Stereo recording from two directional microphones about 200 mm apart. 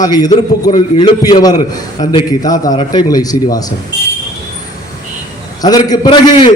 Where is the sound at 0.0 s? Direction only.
20° left (ahead or behind).